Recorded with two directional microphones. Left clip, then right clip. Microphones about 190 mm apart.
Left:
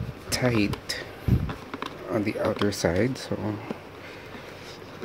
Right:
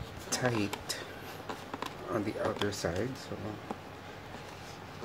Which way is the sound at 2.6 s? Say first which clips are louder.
Left 9 dB; 40° left (ahead or behind).